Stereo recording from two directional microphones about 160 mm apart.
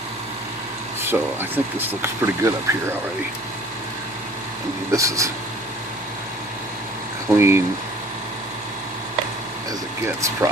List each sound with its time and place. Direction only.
1.0 s speech: 10° right (ahead or behind)
4.9 s speech: 20° right (ahead or behind)
7.3 s speech: 15° right (ahead or behind)
10.2 s speech: 20° right (ahead or behind)